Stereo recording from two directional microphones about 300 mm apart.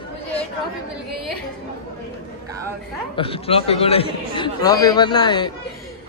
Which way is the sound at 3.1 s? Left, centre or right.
Centre.